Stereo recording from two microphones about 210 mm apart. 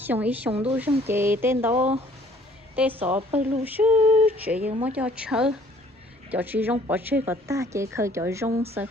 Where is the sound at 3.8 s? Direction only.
20° right (ahead or behind).